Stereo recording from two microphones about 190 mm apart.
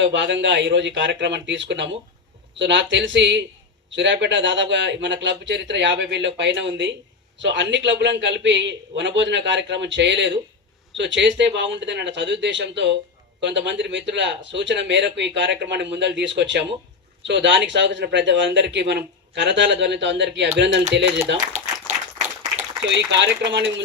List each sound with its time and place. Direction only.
0.0 s a man's voice: 70° right (ahead or behind)
22.8 s a man's voice: 70° right (ahead or behind)